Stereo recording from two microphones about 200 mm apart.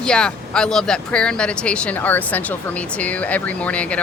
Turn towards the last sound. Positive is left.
turn(degrees=5)  # may be behind; listen again after turning